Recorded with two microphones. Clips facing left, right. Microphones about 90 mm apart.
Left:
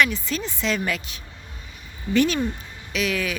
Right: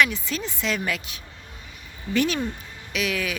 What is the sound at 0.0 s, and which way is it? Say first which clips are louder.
Speech: left 1 dB; 10° right (ahead or behind).